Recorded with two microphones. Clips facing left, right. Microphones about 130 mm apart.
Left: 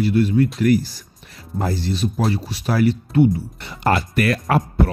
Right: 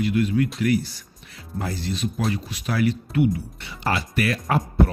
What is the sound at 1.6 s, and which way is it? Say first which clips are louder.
Speech: left 5 dB; 35° left (ahead or behind).